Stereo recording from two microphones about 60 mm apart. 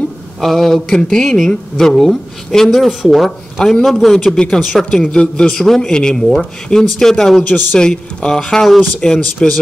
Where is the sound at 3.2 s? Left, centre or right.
Centre.